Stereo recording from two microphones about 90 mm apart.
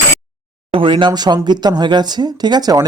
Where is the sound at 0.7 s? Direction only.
70° right (ahead or behind).